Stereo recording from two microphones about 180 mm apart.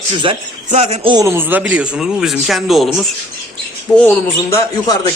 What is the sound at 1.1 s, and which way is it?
A man's voice, 15° right (ahead or behind).